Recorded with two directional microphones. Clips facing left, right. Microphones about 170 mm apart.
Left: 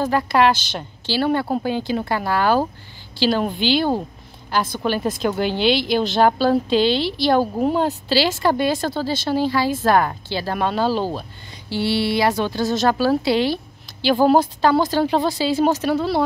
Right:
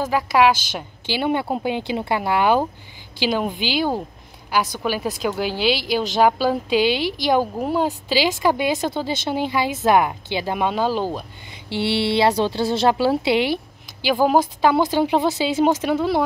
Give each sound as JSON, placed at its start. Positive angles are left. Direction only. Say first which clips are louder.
{"t": 0.0, "sound": "a woman's voice", "louder": "even", "side_deg": -10}
{"t": 11.7, "sound": "a woman's voice", "louder": "even", "side_deg": -25}